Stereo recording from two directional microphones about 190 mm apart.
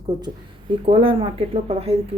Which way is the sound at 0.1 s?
20° right (ahead or behind).